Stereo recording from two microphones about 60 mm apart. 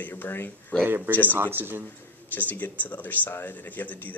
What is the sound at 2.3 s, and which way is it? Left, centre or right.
Speech, left.